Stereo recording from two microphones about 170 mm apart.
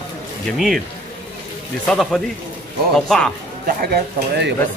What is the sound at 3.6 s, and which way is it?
Speech, 65° right (ahead or behind).